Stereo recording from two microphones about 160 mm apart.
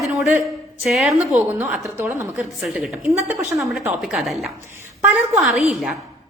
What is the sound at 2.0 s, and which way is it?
Speech, 15° right (ahead or behind).